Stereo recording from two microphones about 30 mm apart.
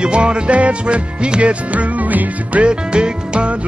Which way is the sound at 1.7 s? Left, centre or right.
Right.